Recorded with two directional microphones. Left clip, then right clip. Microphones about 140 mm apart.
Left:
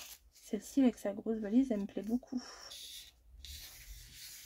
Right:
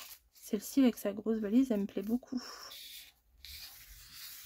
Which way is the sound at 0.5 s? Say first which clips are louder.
Right 2 dB; 30° right (ahead or behind).